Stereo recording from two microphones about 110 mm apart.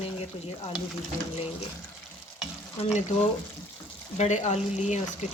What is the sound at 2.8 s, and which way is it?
Stir, 70° left (ahead or behind).